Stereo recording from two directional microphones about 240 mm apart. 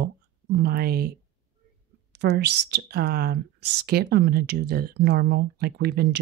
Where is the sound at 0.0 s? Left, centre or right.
Right.